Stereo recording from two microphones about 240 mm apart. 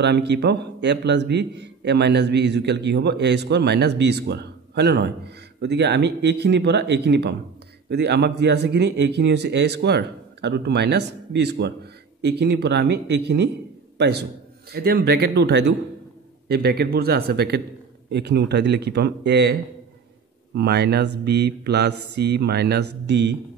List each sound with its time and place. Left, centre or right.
0.0 s a man's voice: right
20.5 s a man's voice: right